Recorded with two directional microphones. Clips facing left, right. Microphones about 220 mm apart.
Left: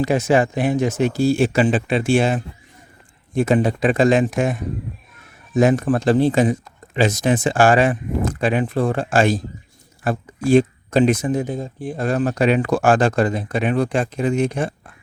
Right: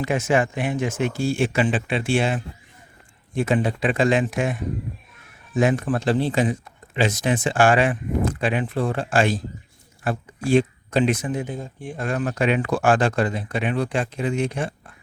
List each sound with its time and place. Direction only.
0.0 s speech: 35° left (ahead or behind)
5.5 s speech: 40° left (ahead or behind)